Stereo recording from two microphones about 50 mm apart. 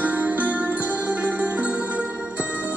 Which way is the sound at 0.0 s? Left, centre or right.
Right.